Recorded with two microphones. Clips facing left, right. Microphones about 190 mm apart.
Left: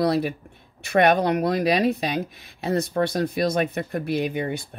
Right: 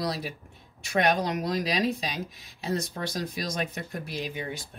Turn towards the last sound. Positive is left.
turn(degrees=60)  # may be behind; listen again after turning